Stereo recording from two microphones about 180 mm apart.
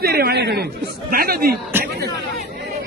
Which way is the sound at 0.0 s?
60° right (ahead or behind).